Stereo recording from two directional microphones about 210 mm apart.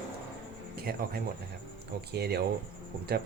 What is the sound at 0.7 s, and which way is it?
Speech, 45° right (ahead or behind).